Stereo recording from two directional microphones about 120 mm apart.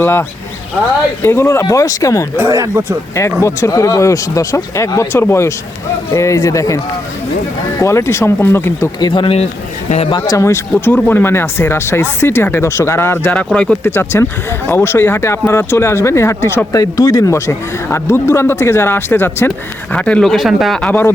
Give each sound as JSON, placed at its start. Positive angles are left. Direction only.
{"t": 0.0, "sound": "speech", "side_deg": 20}
{"t": 2.4, "sound": "speech", "side_deg": -25}
{"t": 3.4, "sound": "speech", "side_deg": 25}
{"t": 7.8, "sound": "speech", "side_deg": 25}
{"t": 9.0, "sound": "speech", "side_deg": 40}
{"t": 10.2, "sound": "speech", "side_deg": 25}
{"t": 13.9, "sound": "speech", "side_deg": 20}